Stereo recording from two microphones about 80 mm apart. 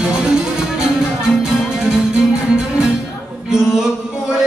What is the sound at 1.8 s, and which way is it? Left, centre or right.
Music, centre.